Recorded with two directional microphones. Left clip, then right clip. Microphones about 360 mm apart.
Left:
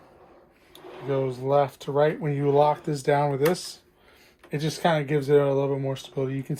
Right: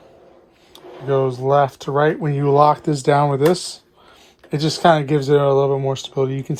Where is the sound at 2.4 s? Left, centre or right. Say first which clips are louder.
Right 7 dB; right.